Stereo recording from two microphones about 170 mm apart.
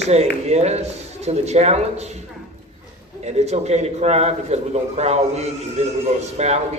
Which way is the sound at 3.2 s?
40° right (ahead or behind).